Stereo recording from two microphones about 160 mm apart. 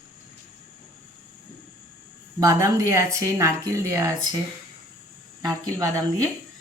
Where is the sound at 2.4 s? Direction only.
20° right (ahead or behind).